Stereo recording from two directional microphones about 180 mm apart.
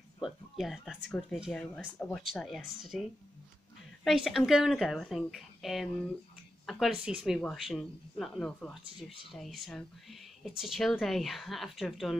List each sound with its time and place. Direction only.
0.2 s speech: centre (ahead or behind)